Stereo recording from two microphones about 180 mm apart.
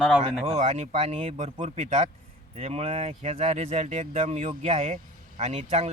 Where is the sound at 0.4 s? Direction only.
35° right (ahead or behind).